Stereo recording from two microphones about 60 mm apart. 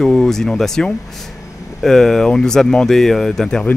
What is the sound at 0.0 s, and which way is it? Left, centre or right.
Speech, centre.